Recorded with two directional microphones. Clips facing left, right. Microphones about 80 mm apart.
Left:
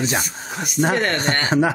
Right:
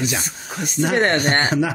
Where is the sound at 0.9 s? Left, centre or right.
Right.